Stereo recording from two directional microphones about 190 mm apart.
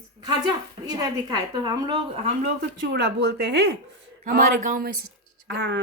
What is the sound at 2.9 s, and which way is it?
Speech, 60° right (ahead or behind).